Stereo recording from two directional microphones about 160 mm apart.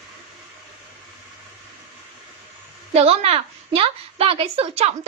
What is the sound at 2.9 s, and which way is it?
A woman's voice, 40° right (ahead or behind).